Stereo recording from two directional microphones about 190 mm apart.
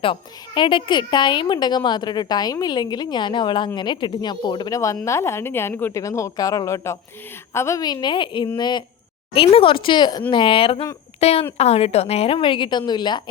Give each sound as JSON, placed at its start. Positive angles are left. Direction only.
{"t": 0.0, "sound": "a woman's voice", "side_deg": 25}